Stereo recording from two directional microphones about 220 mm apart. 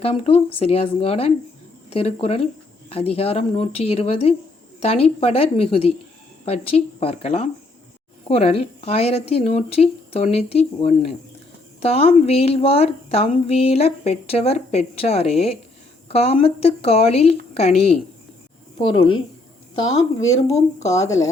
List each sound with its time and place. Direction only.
0.0 s a woman's voice: 25° left (ahead or behind)